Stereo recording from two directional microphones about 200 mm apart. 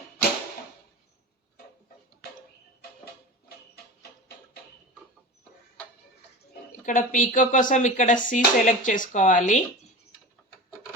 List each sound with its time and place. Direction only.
6.4 s speech: 45° left (ahead or behind)